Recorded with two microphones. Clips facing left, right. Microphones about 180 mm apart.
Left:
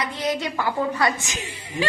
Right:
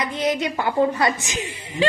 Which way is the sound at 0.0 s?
20° right (ahead or behind).